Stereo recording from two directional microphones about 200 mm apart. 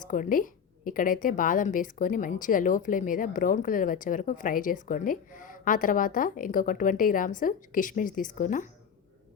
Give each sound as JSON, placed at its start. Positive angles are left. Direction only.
{"t": 0.1, "sound": "speech", "side_deg": 40}